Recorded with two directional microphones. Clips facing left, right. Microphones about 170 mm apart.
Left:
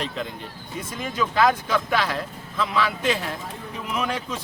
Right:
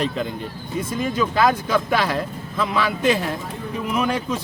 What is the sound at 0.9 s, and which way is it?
A man's voice, 35° right (ahead or behind).